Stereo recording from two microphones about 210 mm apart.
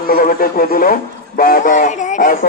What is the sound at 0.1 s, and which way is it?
Music, 40° left (ahead or behind).